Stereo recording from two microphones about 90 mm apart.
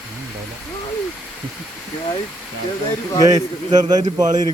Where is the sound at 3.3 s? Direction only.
50° right (ahead or behind).